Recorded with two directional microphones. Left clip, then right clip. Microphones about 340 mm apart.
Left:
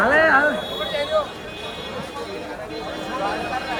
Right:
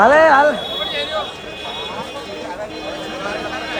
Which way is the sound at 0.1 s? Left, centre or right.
Centre.